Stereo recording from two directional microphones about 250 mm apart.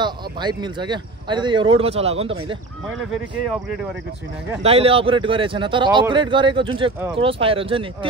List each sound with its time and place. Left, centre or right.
0.0 s speech: centre
4.6 s speech: right